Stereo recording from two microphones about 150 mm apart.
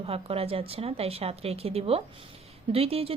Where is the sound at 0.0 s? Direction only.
40° right (ahead or behind).